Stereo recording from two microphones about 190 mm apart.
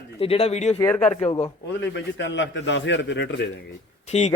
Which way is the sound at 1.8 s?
70° left (ahead or behind).